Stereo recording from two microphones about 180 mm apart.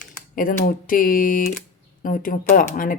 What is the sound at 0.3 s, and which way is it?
Speech, 50° left (ahead or behind).